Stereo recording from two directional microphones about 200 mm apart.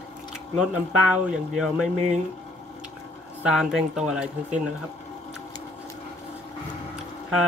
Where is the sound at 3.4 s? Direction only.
5° right (ahead or behind).